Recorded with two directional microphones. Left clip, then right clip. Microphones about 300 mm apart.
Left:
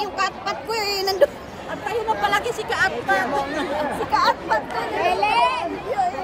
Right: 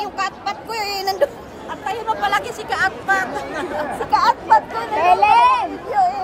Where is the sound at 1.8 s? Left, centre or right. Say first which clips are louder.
Right 1 dB; centre.